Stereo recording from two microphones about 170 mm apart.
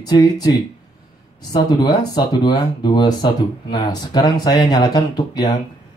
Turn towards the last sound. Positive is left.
turn(degrees=25)  # may be behind; listen again after turning